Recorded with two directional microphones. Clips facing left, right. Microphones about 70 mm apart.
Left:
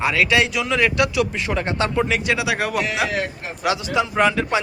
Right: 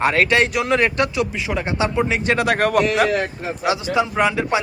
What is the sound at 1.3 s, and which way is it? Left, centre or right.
Speech, centre.